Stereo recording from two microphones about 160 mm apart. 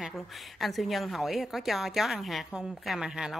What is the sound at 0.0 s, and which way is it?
A woman's voice, centre (ahead or behind).